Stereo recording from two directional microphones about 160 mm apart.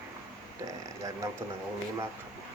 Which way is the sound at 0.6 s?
20° right (ahead or behind).